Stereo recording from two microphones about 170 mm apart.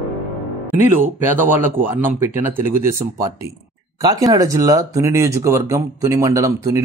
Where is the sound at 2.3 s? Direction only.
45° left (ahead or behind).